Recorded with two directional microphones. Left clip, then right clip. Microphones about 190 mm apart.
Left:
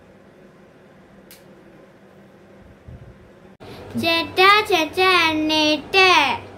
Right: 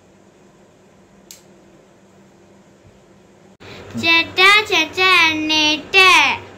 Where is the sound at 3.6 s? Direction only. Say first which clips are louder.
Right 4 dB; 35° left (ahead or behind).